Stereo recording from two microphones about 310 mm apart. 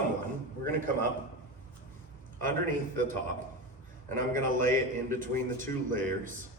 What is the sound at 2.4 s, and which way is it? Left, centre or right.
Speech, right.